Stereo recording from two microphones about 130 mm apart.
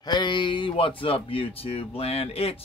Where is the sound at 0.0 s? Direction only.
35° left (ahead or behind).